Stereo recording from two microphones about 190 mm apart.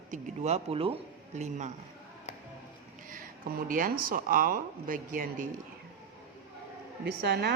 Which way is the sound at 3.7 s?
50° right (ahead or behind).